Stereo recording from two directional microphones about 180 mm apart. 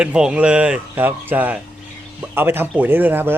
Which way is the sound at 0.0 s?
5° right (ahead or behind).